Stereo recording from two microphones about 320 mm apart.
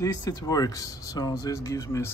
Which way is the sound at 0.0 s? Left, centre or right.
Centre.